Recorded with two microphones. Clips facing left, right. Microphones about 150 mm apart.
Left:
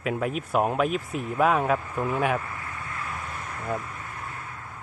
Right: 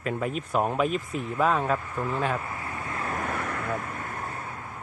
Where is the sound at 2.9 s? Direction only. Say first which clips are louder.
Right 7 dB; 45° right (ahead or behind); by 3.7 s 65° right (ahead or behind).